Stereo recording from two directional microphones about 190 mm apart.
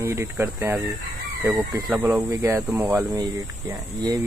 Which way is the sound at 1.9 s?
10° right (ahead or behind).